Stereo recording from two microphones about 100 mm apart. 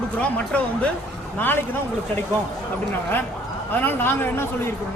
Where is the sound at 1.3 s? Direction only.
20° left (ahead or behind).